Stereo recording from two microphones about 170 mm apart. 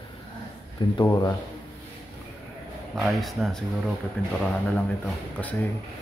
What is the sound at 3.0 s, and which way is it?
Speech, centre (ahead or behind).